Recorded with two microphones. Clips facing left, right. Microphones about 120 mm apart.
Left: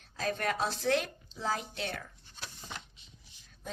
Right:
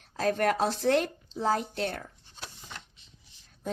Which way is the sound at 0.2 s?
55° right (ahead or behind).